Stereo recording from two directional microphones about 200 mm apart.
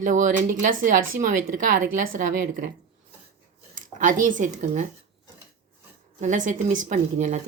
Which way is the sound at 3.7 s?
40° right (ahead or behind).